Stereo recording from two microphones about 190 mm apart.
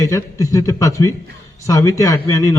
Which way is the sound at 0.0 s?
15° left (ahead or behind).